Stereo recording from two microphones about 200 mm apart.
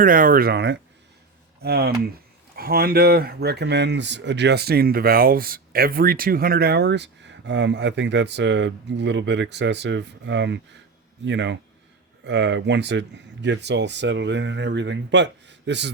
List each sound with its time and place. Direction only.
0.0 s speech: 45° right (ahead or behind); by 15.9 s 60° right (ahead or behind)